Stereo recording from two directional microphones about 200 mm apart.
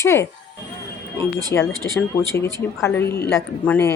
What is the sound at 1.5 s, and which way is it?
Speech, 15° left (ahead or behind).